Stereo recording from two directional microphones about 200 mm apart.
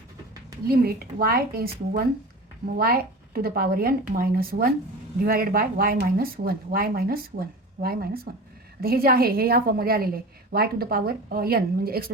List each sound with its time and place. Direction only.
0.7 s a woman's voice: 50° right (ahead or behind)